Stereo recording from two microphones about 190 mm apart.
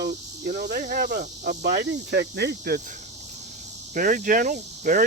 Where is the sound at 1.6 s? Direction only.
60° right (ahead or behind).